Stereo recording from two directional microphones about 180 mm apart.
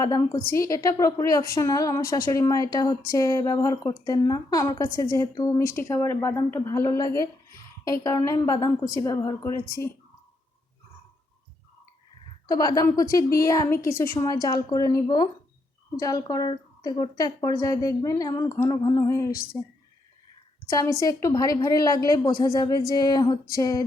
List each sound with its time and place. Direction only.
0.0 s a woman's voice: 20° left (ahead or behind)
12.5 s a woman's voice: 20° left (ahead or behind)